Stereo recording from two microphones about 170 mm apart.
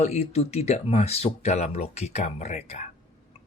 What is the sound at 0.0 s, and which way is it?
Speech, 40° left (ahead or behind).